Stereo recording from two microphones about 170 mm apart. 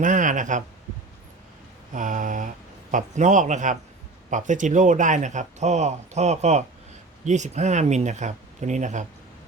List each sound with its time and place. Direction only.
0.0 s speech: 50° right (ahead or behind)
1.9 s speech: 50° right (ahead or behind)